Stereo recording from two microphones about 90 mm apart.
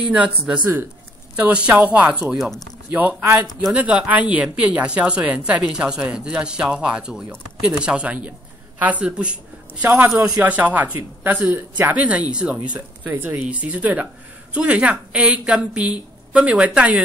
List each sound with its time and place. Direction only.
0.0 s speech: 15° right (ahead or behind)